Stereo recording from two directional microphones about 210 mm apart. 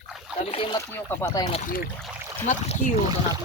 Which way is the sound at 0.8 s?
10° left (ahead or behind).